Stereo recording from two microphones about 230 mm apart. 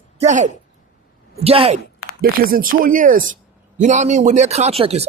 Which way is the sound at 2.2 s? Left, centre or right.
Right.